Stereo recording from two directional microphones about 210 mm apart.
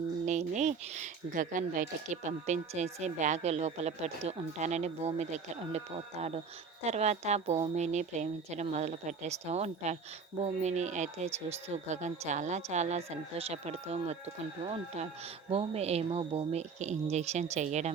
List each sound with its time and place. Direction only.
0.3 s speech: 35° right (ahead or behind)